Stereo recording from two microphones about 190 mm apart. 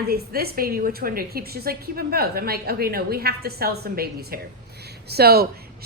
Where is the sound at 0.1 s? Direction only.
55° right (ahead or behind).